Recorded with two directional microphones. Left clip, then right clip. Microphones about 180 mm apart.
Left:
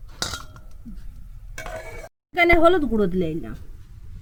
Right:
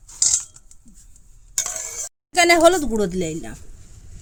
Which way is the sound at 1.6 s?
90° right.